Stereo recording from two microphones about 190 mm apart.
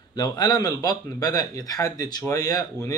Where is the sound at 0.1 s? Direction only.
20° left (ahead or behind).